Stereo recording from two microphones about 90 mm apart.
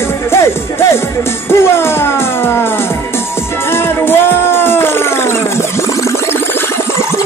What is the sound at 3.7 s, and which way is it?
Music, 25° left (ahead or behind).